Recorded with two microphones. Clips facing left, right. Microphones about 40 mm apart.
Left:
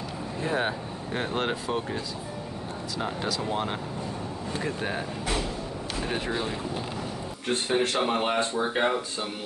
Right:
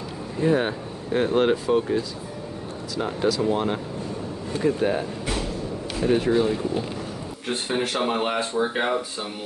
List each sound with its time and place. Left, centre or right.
0.4 s speech: centre